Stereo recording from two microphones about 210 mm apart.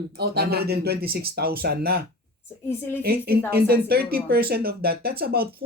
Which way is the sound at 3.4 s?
45° right (ahead or behind).